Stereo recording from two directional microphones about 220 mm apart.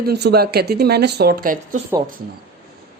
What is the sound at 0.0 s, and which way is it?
Speech, 50° right (ahead or behind).